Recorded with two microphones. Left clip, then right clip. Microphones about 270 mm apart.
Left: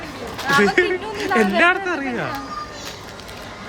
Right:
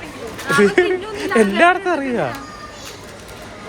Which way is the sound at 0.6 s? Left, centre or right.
Centre.